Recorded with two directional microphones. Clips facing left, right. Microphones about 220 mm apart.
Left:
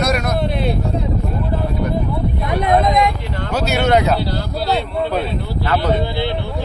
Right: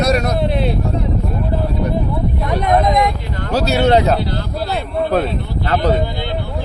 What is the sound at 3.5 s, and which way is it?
Speech, 30° right (ahead or behind).